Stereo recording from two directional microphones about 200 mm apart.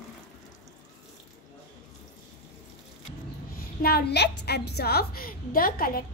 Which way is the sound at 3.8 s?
55° left (ahead or behind).